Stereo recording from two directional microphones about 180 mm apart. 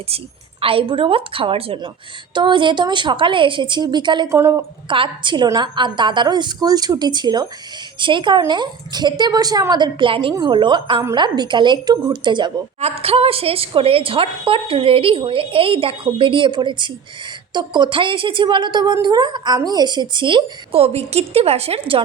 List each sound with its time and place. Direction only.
0.6 s a woman's voice: 30° right (ahead or behind)
4.9 s a woman's voice: 30° right (ahead or behind)